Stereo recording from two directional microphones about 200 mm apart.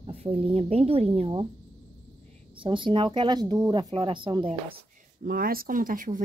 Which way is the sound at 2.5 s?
25° right (ahead or behind).